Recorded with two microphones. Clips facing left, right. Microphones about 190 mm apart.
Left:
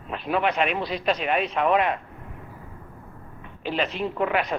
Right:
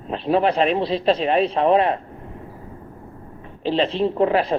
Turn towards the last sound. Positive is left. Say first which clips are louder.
# right 6 dB
turn(degrees=-30)  # may be behind; listen again after turning